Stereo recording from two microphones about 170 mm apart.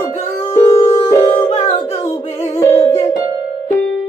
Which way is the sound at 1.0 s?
20° left (ahead or behind).